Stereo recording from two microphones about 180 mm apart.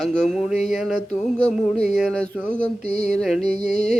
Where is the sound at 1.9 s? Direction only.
5° left (ahead or behind).